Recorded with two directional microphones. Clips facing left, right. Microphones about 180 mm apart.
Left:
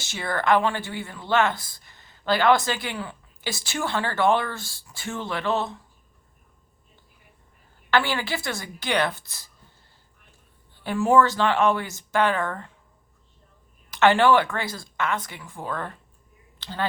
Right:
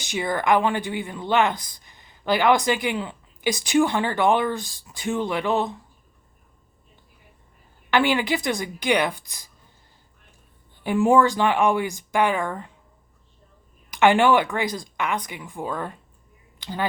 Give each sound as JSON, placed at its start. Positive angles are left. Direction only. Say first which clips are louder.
{"t": 0.0, "sound": "speech", "louder": "right 3 dB", "side_deg": -15}
{"t": 7.9, "sound": "speech", "louder": "right 3 dB", "side_deg": -15}
{"t": 10.8, "sound": "speech", "louder": "right 2 dB", "side_deg": -15}
{"t": 13.9, "sound": "speech", "louder": "right 1 dB", "side_deg": -15}
{"t": 16.6, "sound": "a sound", "louder": "right 2 dB", "side_deg": -15}